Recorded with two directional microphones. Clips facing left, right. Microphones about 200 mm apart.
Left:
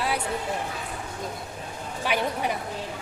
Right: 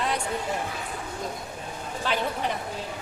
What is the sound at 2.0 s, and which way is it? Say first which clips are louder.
Speech: left 1 dB; 10° left (ahead or behind).